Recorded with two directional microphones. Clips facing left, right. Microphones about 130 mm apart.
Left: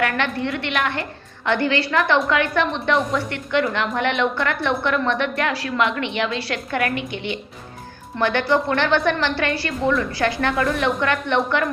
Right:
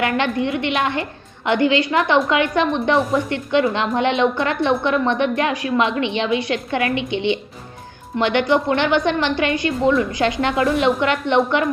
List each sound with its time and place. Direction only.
0.0 s a woman's voice: 20° right (ahead or behind)